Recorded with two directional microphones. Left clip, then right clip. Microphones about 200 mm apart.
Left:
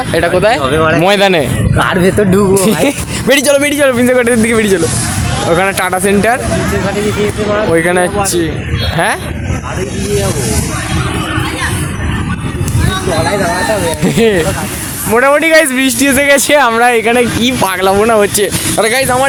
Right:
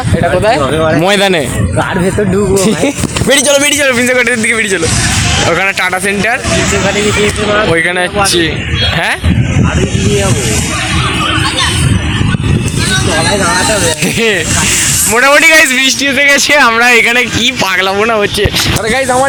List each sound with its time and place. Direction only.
1.0 s speech: 5° right (ahead or behind)
2.6 s speech: centre (ahead or behind)
3.3 s a man's voice: 15° left (ahead or behind)
7.7 s speech: centre (ahead or behind)
14.0 s a man's voice: 5° left (ahead or behind)
16.0 s speech: 45° left (ahead or behind)
16.2 s a man's voice: 15° left (ahead or behind)